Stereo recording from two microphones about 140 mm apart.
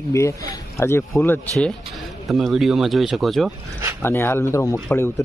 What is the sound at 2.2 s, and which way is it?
Speech, centre (ahead or behind).